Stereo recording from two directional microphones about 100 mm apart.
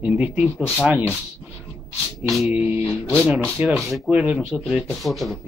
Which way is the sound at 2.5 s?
15° right (ahead or behind).